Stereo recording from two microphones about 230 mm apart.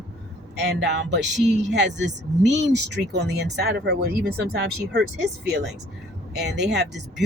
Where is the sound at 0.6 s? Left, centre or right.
Right.